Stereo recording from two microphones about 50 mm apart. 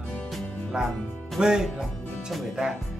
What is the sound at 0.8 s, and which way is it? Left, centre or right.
Speech, centre.